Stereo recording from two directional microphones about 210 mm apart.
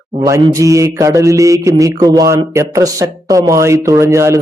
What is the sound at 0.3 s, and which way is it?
Speech, 15° right (ahead or behind).